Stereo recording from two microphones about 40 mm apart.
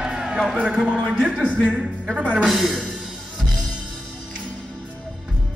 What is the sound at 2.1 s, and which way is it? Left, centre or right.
Speech, right.